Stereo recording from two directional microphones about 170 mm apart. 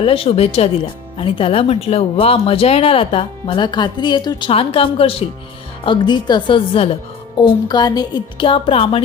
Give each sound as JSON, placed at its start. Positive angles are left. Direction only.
{"t": 0.0, "sound": "speech", "side_deg": 35}